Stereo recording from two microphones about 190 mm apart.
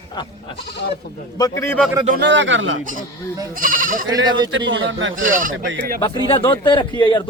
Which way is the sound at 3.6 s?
45° right (ahead or behind).